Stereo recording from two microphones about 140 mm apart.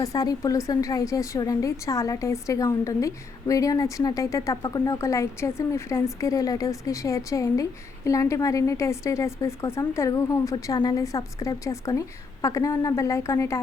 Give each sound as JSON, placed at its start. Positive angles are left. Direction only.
{"t": 0.0, "sound": "a woman's voice", "side_deg": 25}